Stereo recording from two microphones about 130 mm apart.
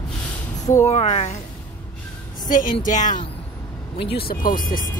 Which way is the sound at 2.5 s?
90° left.